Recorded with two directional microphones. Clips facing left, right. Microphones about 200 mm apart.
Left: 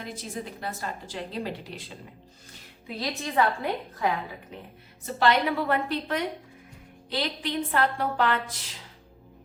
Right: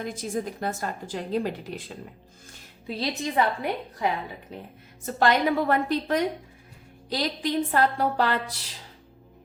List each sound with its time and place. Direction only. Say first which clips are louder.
0.0 s a woman's voice: right 6 dB; 45° right (ahead or behind)
2.8 s a woman's voice: right 3 dB; 25° right (ahead or behind)
4.5 s a woman's voice: right 3 dB; 35° right (ahead or behind)